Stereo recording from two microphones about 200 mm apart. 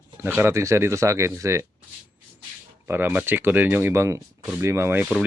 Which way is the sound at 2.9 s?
10° right (ahead or behind).